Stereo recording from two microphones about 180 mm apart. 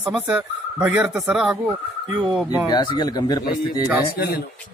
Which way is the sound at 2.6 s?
25° left (ahead or behind).